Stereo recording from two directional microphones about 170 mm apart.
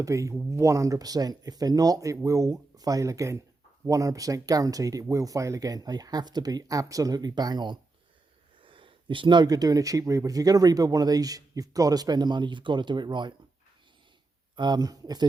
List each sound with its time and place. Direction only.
0.0 s speech: 20° right (ahead or behind)
14.5 s speech: 25° right (ahead or behind)